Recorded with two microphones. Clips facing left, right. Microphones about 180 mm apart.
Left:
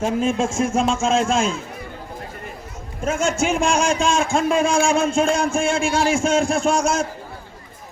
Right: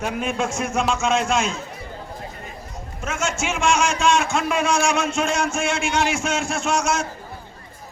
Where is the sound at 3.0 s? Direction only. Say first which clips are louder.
Left 5 dB; 35° left (ahead or behind).